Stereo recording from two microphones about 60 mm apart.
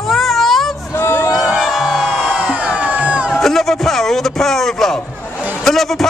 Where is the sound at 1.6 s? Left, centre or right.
Centre.